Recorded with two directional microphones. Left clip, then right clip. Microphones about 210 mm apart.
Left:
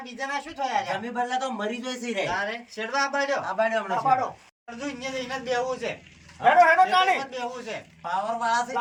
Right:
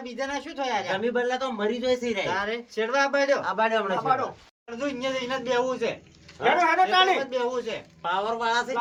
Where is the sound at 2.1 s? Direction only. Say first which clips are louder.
Even; 20° right (ahead or behind).